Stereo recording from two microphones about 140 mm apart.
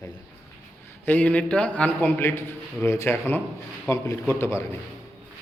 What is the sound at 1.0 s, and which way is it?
A man's voice, 10° left (ahead or behind).